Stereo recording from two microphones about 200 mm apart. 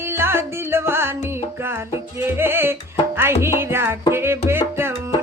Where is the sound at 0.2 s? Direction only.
10° right (ahead or behind).